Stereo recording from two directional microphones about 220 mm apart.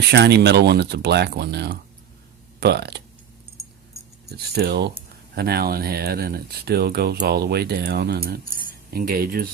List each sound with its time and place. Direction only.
0.1 s speech: 50° right (ahead or behind)
4.3 s speech: 45° right (ahead or behind)